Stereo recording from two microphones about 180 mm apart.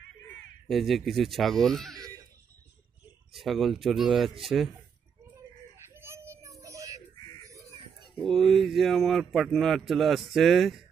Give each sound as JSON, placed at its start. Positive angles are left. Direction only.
{"t": 0.7, "sound": "speech", "side_deg": 0}
{"t": 3.3, "sound": "speech", "side_deg": 0}
{"t": 5.9, "sound": "whimper", "side_deg": -15}
{"t": 6.6, "sound": "music", "side_deg": -15}
{"t": 8.2, "sound": "speech", "side_deg": 0}